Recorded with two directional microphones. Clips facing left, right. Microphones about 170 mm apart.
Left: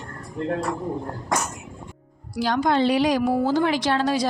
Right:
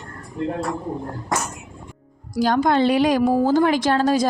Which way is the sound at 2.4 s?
45° right (ahead or behind).